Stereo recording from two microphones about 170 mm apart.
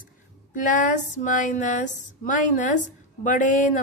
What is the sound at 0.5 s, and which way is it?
Speech, 50° left (ahead or behind).